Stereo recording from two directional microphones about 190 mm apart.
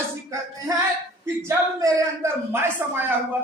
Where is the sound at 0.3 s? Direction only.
15° right (ahead or behind).